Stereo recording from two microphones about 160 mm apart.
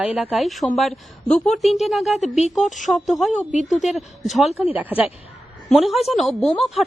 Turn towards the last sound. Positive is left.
turn(degrees=0)  # may be behind; listen again after turning